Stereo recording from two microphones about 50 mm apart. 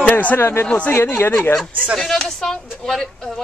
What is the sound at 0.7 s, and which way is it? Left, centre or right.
Speech, left.